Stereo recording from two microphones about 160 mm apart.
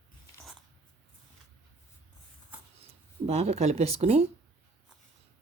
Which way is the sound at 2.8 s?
40° right (ahead or behind).